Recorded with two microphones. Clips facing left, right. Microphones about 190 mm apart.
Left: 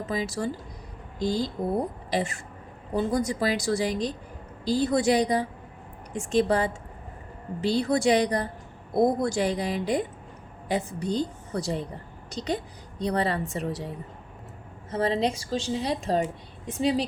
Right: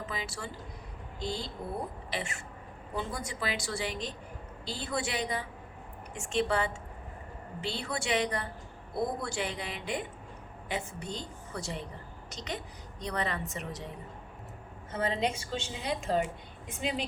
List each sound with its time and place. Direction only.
0.0 s a woman's voice: 40° left (ahead or behind)
14.8 s a woman's voice: 35° left (ahead or behind)